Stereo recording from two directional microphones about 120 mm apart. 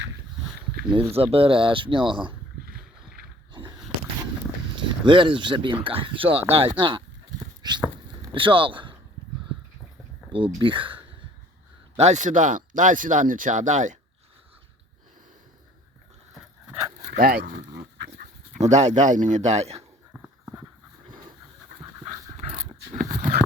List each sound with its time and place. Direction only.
0.9 s speech: 50° right (ahead or behind)
4.7 s speech: 40° right (ahead or behind)
8.3 s speech: 45° right (ahead or behind)
10.3 s speech: 45° right (ahead or behind)
11.9 s speech: 75° right (ahead or behind); by 14.0 s 90° right
17.1 s a man's voice: 65° right (ahead or behind)
20.4 s horse: 20° right (ahead or behind)
23.0 s a sound: 90° right